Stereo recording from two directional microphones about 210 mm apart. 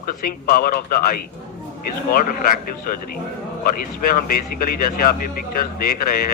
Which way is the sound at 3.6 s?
45° left (ahead or behind).